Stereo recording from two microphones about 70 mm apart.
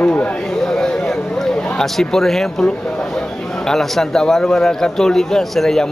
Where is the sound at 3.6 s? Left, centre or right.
Centre.